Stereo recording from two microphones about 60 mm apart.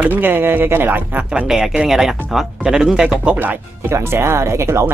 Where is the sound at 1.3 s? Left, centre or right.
Centre.